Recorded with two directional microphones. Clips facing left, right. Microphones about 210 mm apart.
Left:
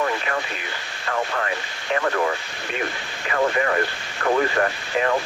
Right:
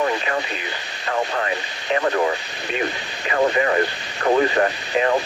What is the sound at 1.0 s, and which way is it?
Speech, 20° right (ahead or behind).